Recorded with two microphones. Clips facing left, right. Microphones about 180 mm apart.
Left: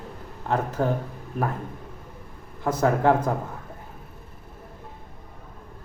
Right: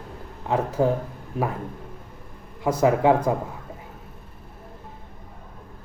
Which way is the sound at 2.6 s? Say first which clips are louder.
Right 2 dB; 5° right (ahead or behind).